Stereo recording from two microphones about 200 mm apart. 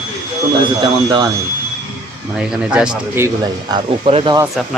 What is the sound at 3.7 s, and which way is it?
Speech, 25° right (ahead or behind).